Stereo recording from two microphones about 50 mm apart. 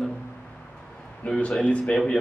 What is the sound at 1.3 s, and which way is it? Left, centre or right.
Speech, left.